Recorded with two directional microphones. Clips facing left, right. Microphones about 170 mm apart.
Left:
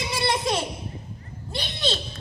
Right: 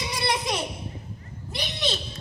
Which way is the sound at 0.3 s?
30° left (ahead or behind).